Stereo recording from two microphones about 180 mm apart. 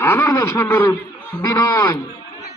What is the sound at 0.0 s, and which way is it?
Speech, 15° left (ahead or behind).